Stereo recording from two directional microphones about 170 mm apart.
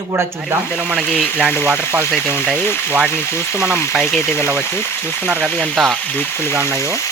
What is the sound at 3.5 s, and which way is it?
Speech, 5° right (ahead or behind).